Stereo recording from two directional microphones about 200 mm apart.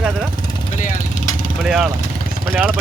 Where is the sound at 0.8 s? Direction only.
40° left (ahead or behind).